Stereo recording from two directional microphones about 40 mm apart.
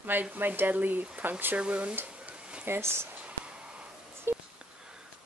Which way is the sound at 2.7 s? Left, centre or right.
Right.